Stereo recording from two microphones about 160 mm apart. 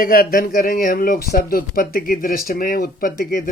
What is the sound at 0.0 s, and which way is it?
Speech, 65° left (ahead or behind).